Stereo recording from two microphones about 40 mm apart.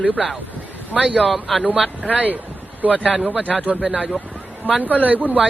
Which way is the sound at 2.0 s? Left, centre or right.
Right.